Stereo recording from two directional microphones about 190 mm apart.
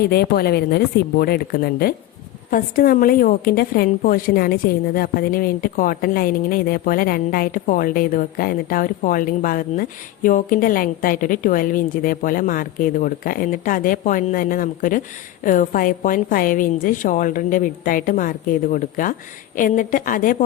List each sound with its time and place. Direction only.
0.0 s a woman's voice: 55° left (ahead or behind)